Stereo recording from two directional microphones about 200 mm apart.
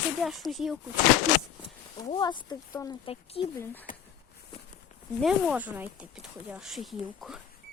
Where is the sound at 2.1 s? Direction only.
25° left (ahead or behind).